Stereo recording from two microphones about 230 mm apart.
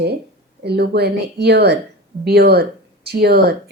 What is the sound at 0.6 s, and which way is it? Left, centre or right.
Speech, right.